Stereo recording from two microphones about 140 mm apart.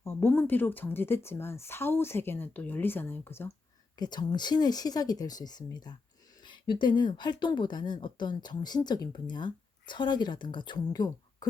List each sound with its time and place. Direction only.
0.0 s a woman's voice: 20° left (ahead or behind)
3.9 s speech: 30° left (ahead or behind)